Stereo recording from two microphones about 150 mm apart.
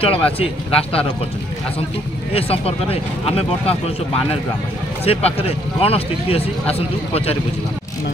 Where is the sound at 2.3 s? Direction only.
40° left (ahead or behind).